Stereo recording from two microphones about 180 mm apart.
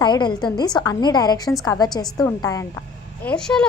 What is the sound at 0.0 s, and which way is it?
A woman's voice, 25° left (ahead or behind).